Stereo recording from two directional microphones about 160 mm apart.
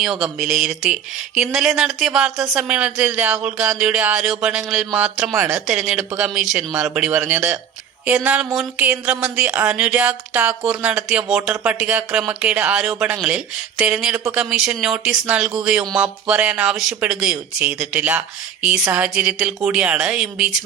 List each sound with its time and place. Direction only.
0.0 s speech: centre (ahead or behind)
5.3 s speech: 20° right (ahead or behind)
5.5 s speech: 5° right (ahead or behind)